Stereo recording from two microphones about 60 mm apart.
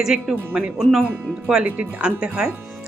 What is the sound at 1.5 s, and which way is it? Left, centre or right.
Speech, centre.